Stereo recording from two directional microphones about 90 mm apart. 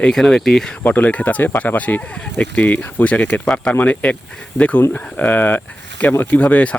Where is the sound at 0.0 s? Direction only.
5° left (ahead or behind).